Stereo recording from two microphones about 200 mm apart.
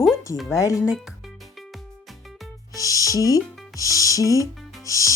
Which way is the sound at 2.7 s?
15° left (ahead or behind).